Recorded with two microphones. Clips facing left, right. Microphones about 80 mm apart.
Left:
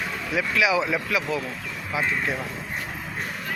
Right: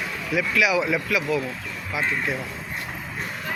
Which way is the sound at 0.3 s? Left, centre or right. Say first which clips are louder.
Right 1 dB; left.